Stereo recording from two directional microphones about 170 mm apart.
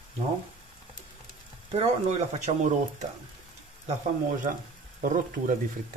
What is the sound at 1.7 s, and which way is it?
Speech, 40° right (ahead or behind).